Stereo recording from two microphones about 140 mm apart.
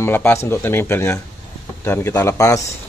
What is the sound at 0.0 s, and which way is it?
Speech, 15° left (ahead or behind).